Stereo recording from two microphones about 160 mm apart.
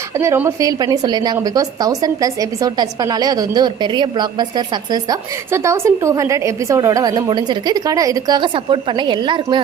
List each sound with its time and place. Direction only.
0.2 s a woman's voice: 15° right (ahead or behind)